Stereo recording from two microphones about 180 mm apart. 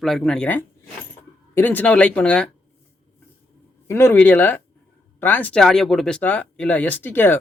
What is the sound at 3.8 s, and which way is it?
Speech, 15° left (ahead or behind).